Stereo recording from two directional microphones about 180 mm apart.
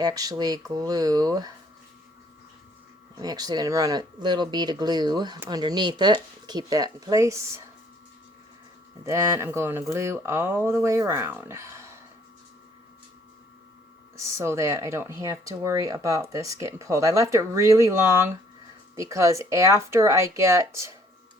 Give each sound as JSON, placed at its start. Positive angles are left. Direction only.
{"t": 0.0, "sound": "speech", "side_deg": -20}
{"t": 3.2, "sound": "speech", "side_deg": -20}
{"t": 9.0, "sound": "speech", "side_deg": -15}
{"t": 14.2, "sound": "speech", "side_deg": -15}